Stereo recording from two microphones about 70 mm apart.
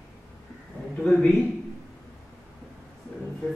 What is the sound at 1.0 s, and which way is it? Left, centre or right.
Speech, centre.